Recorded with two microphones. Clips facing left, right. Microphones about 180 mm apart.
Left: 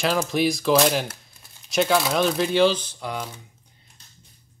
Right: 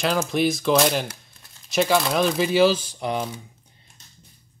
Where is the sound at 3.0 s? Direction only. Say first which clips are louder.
Right 6 dB; 25° right (ahead or behind).